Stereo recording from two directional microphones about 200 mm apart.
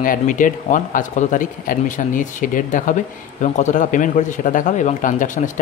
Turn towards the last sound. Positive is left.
turn(degrees=40)  # may be behind; listen again after turning